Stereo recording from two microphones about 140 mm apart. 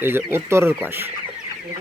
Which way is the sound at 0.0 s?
15° right (ahead or behind).